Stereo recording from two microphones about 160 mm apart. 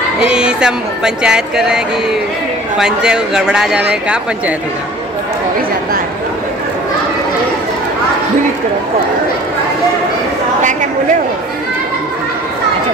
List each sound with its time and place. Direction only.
0.3 s a man's voice: 5° right (ahead or behind)
2.8 s a man's voice: 5° right (ahead or behind)
10.6 s chatter: 50° right (ahead or behind)